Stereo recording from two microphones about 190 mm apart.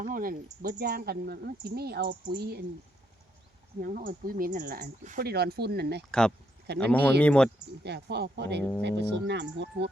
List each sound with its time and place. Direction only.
0.0 s speech: 45° right (ahead or behind)
3.8 s speech: 50° right (ahead or behind)
6.1 s speech: 5° left (ahead or behind)
6.7 s speech: 60° right (ahead or behind)
7.2 s speech: 5° left (ahead or behind)
7.9 s speech: 60° right (ahead or behind)